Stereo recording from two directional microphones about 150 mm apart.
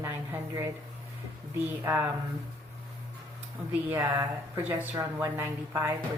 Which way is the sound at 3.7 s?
15° right (ahead or behind).